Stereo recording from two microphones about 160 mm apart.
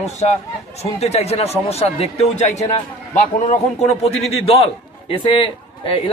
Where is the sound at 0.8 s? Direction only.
40° left (ahead or behind).